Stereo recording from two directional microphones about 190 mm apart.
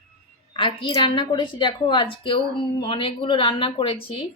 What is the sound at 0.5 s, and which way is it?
Speech, 25° left (ahead or behind).